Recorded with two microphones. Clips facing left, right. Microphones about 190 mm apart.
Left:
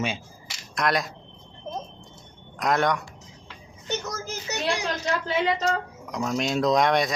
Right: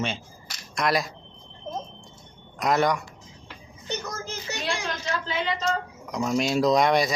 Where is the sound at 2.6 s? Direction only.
Centre (ahead or behind).